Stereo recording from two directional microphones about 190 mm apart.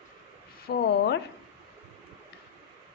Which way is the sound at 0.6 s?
60° left (ahead or behind).